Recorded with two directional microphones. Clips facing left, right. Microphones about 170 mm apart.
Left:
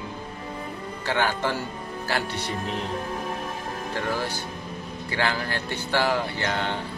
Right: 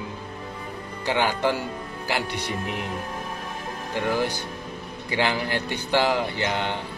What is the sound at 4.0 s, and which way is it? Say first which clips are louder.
Speech: right 5 dB; 15° right (ahead or behind).